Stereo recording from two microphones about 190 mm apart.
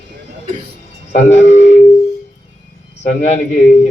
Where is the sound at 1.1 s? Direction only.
40° left (ahead or behind).